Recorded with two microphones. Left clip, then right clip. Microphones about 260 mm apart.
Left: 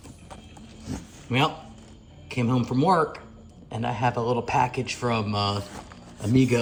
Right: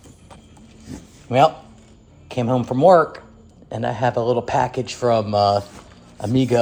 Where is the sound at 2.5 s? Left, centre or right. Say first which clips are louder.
Right 10 dB; right.